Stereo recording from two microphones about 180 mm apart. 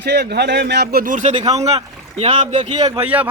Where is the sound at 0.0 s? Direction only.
65° right (ahead or behind); by 1.3 s 45° right (ahead or behind).